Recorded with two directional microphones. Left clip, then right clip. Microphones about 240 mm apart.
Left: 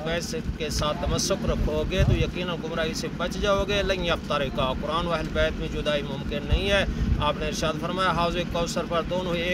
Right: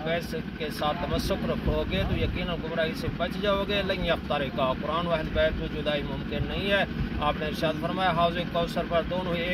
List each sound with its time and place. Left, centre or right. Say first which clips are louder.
0.8 s speech: left 1 dB; left
2.8 s speech: right 1 dB; left